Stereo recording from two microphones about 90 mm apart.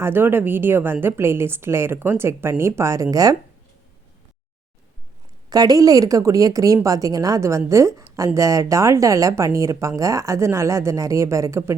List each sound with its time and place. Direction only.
0.0 s a woman's voice: 25° right (ahead or behind); by 3.3 s 40° right (ahead or behind)
5.5 s speech: 45° right (ahead or behind)